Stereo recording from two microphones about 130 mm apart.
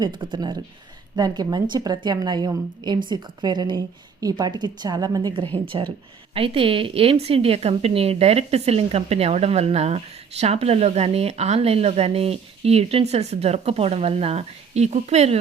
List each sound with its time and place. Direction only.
0.0 s a woman's voice: 40° right (ahead or behind)
5.5 s a woman's voice: 40° right (ahead or behind)